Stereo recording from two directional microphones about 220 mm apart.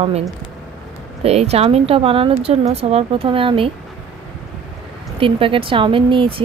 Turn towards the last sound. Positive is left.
turn(degrees=-25)  # may be behind; listen again after turning